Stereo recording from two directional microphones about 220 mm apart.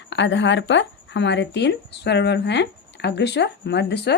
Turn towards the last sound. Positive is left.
turn(degrees=50)  # may be behind; listen again after turning